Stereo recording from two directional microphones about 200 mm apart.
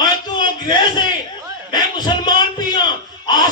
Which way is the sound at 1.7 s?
20° left (ahead or behind).